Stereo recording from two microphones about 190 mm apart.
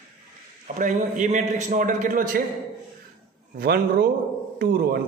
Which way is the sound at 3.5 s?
55° right (ahead or behind).